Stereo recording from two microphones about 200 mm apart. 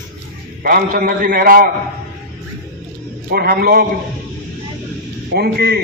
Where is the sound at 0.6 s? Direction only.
45° right (ahead or behind).